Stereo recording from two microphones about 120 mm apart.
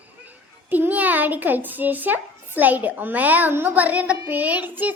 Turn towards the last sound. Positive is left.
turn(degrees=-15)  # may be behind; listen again after turning